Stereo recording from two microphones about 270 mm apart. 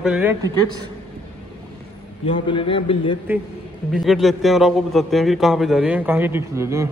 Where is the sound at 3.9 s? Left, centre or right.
Centre.